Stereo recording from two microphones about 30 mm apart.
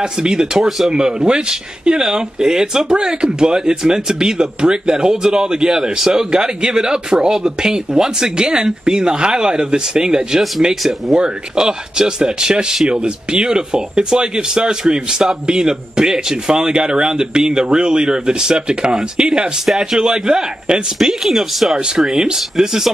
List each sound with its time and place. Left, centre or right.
0.0 s speech: right
0.6 s speech: centre
0.8 s speech: right
11.5 s speech: right
21.3 s speech: centre
21.7 s speech: right